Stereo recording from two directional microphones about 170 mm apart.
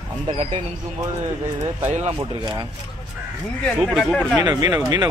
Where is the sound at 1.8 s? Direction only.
40° right (ahead or behind).